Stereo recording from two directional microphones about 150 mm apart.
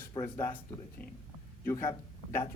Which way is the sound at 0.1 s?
20° left (ahead or behind).